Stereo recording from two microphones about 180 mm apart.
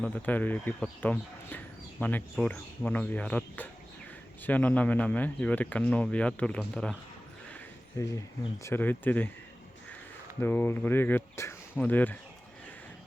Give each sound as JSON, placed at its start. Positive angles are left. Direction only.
{"t": 0.0, "sound": "speech", "side_deg": 10}
{"t": 7.5, "sound": "a sound", "side_deg": 15}
{"t": 8.6, "sound": "speech", "side_deg": 10}
{"t": 10.4, "sound": "speech", "side_deg": 10}